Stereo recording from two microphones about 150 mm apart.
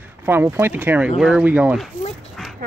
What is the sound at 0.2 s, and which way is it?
Speech, 15° right (ahead or behind).